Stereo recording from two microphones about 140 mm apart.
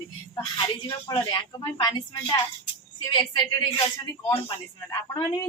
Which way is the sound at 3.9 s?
25° left (ahead or behind).